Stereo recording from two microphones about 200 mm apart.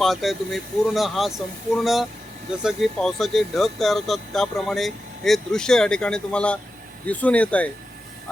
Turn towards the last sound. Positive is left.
turn(degrees=5)  # may be behind; listen again after turning